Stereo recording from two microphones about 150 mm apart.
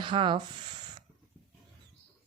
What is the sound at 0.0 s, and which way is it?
Speech, 30° right (ahead or behind).